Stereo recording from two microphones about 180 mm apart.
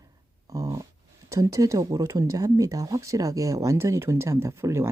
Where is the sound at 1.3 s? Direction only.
20° right (ahead or behind).